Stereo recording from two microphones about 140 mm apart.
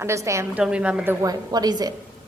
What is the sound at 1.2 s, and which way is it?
Speech, 25° right (ahead or behind).